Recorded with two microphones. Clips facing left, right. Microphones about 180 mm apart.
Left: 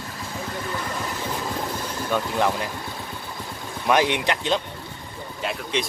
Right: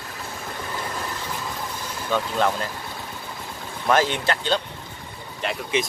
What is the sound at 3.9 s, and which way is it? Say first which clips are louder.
Speech: even; 15° left (ahead or behind).